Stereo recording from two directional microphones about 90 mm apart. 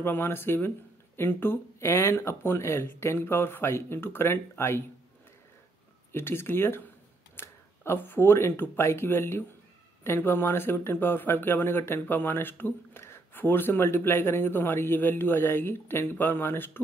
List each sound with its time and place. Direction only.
0.0 s speech: 25° left (ahead or behind)
6.1 s speech: 25° left (ahead or behind)